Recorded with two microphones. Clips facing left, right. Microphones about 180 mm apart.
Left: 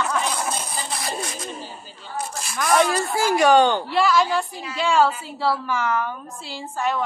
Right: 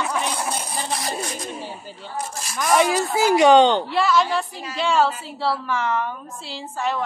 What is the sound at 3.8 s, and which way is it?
Speech, centre (ahead or behind).